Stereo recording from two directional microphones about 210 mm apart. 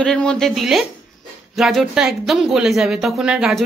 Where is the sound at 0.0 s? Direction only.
5° left (ahead or behind).